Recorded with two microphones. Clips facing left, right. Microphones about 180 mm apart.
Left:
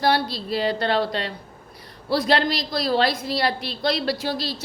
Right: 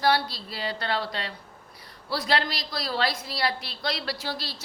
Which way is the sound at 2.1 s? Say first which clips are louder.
Left 7 dB; 20° left (ahead or behind).